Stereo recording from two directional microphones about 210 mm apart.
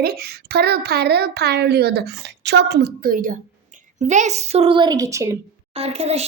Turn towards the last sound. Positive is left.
turn(degrees=-30)  # may be behind; listen again after turning